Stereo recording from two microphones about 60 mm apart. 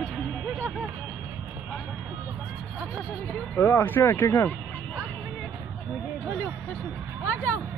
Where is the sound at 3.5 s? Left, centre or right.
Left.